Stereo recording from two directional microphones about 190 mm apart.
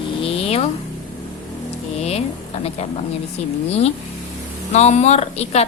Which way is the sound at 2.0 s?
35° left (ahead or behind).